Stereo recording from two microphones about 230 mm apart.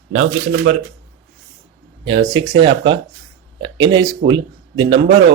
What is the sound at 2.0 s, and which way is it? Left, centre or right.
Speech, right.